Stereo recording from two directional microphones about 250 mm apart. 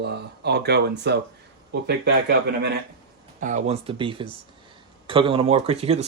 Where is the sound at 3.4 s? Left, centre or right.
Right.